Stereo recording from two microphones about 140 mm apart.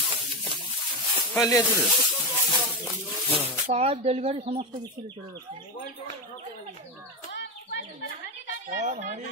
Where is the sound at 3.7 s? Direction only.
45° right (ahead or behind).